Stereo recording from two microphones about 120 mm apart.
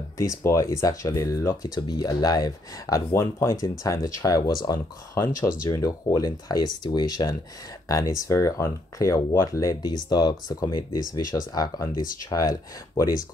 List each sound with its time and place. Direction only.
0.2 s speech: 25° left (ahead or behind)